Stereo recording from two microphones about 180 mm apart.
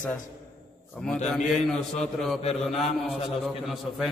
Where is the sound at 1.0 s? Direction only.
5° left (ahead or behind).